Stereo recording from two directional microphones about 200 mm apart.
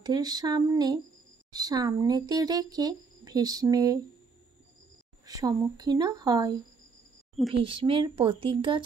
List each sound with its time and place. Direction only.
0.0 s speech: 20° right (ahead or behind)
5.2 s speech: 20° right (ahead or behind)